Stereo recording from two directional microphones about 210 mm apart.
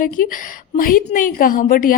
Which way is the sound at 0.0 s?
40° left (ahead or behind).